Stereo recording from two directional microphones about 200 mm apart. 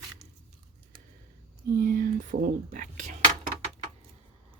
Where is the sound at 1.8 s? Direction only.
45° right (ahead or behind).